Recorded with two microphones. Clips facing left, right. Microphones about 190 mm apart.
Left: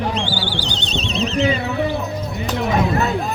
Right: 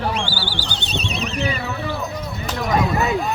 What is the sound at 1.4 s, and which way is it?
Speech, 20° left (ahead or behind).